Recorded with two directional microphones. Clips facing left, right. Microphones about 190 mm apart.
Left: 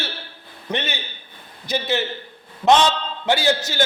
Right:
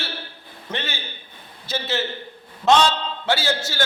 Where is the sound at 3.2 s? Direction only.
15° left (ahead or behind).